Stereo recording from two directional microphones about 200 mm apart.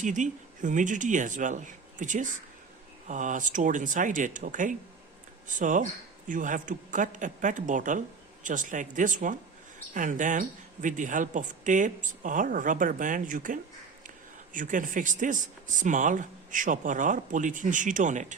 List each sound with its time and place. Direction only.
0.0 s speech: 40° right (ahead or behind)